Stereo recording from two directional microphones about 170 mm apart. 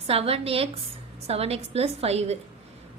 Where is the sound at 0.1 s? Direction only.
35° right (ahead or behind).